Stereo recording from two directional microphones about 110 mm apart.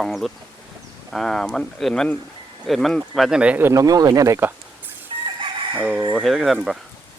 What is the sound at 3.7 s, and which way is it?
Speech, 30° right (ahead or behind).